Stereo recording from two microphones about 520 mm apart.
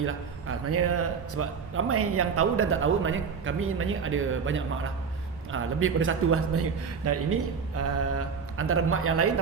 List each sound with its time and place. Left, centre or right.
0.0 s a man's voice: right